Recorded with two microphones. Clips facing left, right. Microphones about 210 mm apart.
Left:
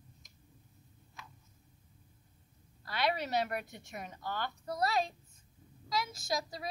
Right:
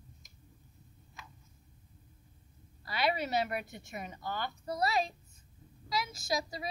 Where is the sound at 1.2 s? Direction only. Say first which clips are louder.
Even; centre (ahead or behind).